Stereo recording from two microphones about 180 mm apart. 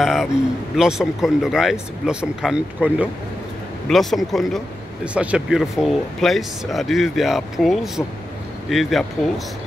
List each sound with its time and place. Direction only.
0.0 s speech: centre (ahead or behind)